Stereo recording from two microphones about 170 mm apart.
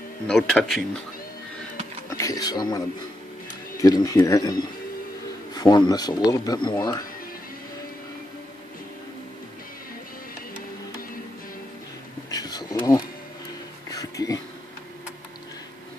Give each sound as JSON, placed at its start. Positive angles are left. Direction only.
{"t": 0.3, "sound": "speech", "side_deg": 0}
{"t": 2.0, "sound": "speech", "side_deg": 20}
{"t": 12.3, "sound": "a sound", "side_deg": 25}
{"t": 13.8, "sound": "music", "side_deg": 20}